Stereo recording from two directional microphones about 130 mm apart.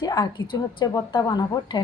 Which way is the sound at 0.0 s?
35° left (ahead or behind).